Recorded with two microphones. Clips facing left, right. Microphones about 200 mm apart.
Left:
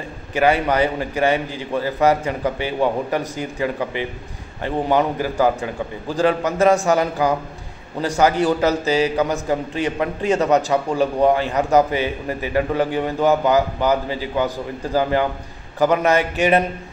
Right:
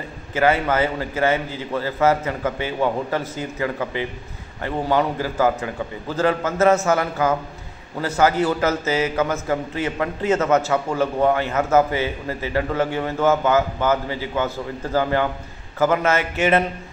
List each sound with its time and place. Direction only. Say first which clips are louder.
0.3 s a man's voice: left 1 dB; 15° left (ahead or behind)